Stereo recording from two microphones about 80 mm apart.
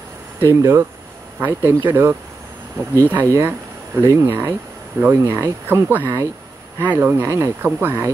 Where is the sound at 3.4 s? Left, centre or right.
Right.